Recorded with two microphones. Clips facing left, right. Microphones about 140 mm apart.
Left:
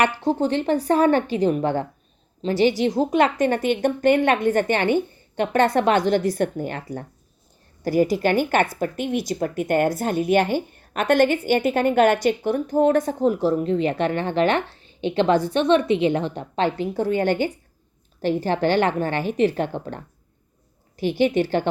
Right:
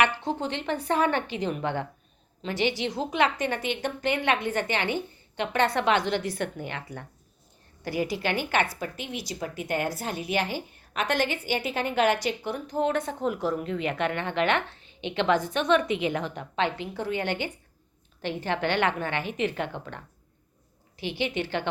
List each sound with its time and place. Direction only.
0.2 s a woman's voice: 40° left (ahead or behind)